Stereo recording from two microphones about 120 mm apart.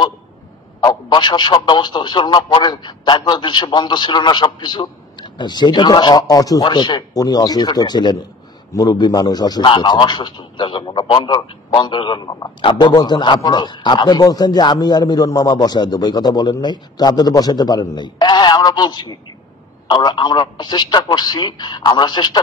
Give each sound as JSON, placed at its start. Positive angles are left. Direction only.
{"t": 0.7, "sound": "speech", "side_deg": 35}